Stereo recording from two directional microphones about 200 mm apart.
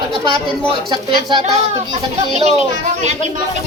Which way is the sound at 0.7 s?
25° right (ahead or behind).